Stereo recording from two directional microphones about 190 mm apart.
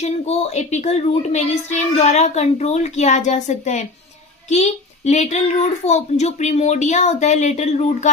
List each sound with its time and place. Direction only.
0.0 s a woman's voice: 35° left (ahead or behind)